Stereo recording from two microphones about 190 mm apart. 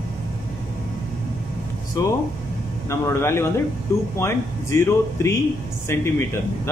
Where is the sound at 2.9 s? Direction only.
15° left (ahead or behind).